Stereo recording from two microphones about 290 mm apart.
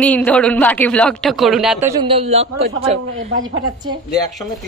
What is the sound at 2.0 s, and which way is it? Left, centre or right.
Speech, centre.